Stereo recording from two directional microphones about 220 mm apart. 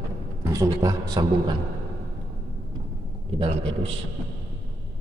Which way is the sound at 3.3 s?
25° right (ahead or behind).